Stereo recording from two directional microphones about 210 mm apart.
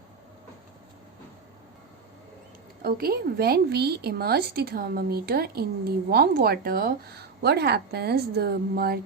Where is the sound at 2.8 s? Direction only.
45° right (ahead or behind).